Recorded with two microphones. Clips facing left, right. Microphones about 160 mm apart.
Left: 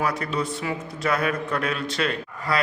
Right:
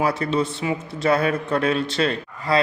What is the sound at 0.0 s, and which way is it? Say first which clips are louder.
A man's voice: right 4 dB; 25° right (ahead or behind).